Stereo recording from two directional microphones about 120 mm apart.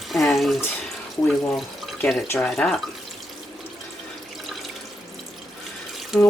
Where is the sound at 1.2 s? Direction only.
20° left (ahead or behind).